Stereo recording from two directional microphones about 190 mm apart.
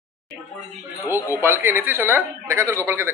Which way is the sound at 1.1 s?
15° left (ahead or behind).